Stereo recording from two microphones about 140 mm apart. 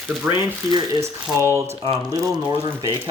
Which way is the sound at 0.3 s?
10° right (ahead or behind).